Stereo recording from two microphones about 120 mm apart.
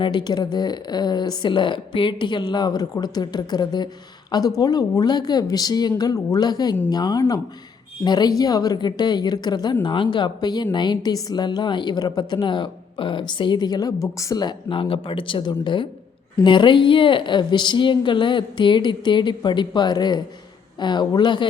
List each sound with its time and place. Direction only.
0.0 s a woman's voice: 40° left (ahead or behind)